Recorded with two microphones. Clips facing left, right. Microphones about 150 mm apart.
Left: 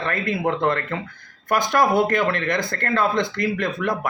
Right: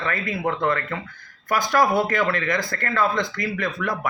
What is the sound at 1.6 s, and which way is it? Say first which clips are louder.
Speech: left 1 dB; 20° left (ahead or behind).